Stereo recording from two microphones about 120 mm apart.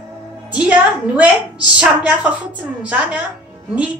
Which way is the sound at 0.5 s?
10° right (ahead or behind).